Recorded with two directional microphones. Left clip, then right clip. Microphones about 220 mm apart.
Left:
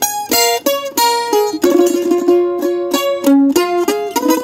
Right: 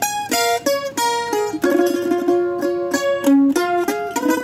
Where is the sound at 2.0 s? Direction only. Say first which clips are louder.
Left 5 dB; 25° left (ahead or behind).